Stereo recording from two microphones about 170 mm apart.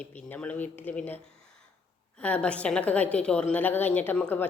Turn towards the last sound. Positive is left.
turn(degrees=10)  # may be behind; listen again after turning